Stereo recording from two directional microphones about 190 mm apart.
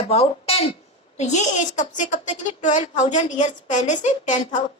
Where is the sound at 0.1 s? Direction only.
30° left (ahead or behind).